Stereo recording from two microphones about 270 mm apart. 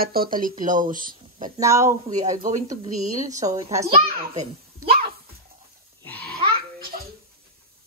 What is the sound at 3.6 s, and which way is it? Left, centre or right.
Speech, centre.